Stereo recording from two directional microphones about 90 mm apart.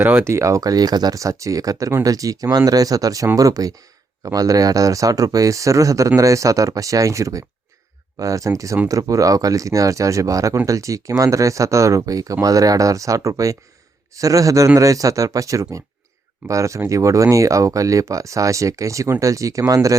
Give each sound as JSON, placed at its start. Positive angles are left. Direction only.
{"t": 0.0, "sound": "speech", "side_deg": -25}